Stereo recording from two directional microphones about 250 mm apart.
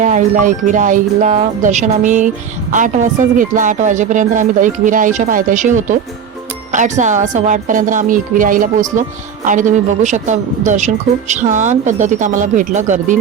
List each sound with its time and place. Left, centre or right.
0.0 s speech: right